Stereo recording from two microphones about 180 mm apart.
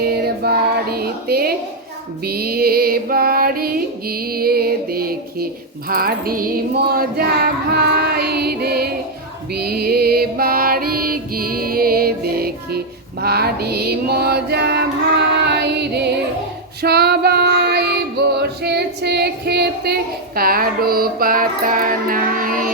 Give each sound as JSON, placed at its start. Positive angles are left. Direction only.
{"t": 0.0, "sound": "music", "side_deg": -60}
{"t": 2.2, "sound": "a sound", "side_deg": -60}
{"t": 5.9, "sound": "music", "side_deg": -55}
{"t": 15.4, "sound": "a capella", "side_deg": -70}
{"t": 16.8, "sound": "female singing", "side_deg": -60}
{"t": 18.3, "sound": "a sound", "side_deg": -65}